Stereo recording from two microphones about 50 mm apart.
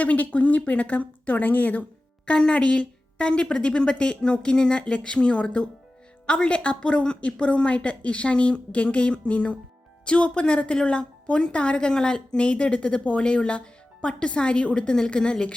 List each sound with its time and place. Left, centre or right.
0.0 s speech: left
2.2 s a woman's voice: centre